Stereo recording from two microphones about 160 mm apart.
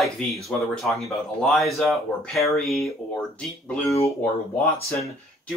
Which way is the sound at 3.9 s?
20° left (ahead or behind).